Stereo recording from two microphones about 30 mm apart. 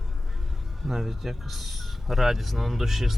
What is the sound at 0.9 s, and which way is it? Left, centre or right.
Speech, centre.